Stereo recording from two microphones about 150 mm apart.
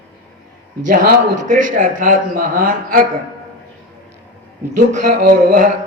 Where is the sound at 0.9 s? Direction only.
60° right (ahead or behind).